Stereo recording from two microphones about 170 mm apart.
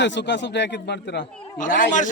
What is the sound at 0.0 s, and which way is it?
Speech, 90° left.